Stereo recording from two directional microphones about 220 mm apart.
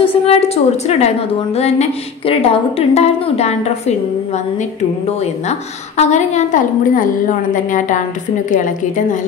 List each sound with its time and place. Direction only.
0.0 s a woman's voice: 30° left (ahead or behind)
5.2 s a woman's voice: 30° left (ahead or behind)